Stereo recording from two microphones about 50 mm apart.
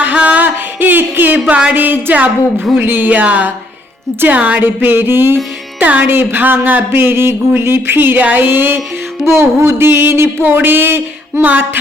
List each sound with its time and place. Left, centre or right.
0.0 s music: right
1.7 s a woman's voice: right
4.6 s speech: right
5.8 s a woman's voice: right
6.1 s speech: right
9.2 s speech: right